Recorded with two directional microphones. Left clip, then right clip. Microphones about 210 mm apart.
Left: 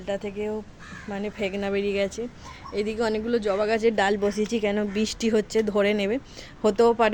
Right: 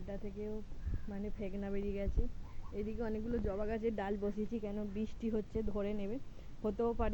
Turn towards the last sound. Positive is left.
turn(degrees=25)  # may be behind; listen again after turning